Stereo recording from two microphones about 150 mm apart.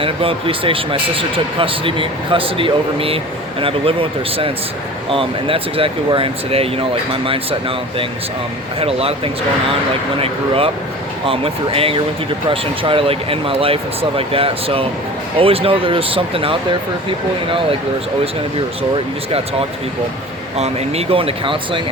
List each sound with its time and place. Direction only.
0.0 s a man's voice: 35° right (ahead or behind)
20.6 s a man's voice: 45° right (ahead or behind)